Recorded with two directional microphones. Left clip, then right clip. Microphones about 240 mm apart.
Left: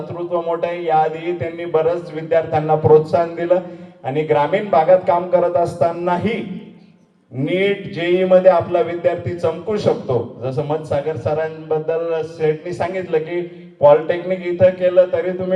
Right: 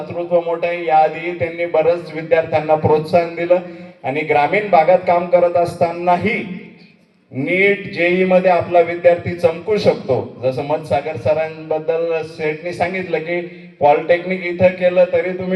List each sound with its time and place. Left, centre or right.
0.4 s speech: right
7.4 s speech: right